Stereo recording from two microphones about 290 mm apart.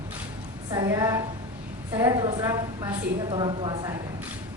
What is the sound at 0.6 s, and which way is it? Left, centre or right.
A woman's voice, centre.